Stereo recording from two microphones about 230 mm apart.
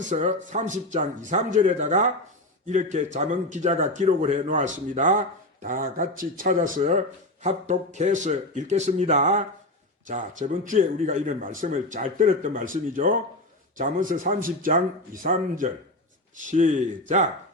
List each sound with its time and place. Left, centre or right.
0.0 s speech: right